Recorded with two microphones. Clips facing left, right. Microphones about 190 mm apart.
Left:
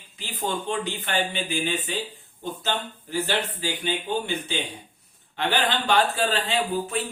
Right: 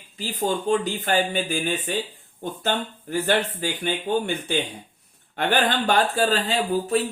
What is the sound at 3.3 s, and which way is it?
Speech, 50° right (ahead or behind).